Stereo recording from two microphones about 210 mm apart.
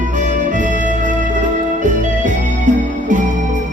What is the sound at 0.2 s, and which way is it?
Music, 35° right (ahead or behind).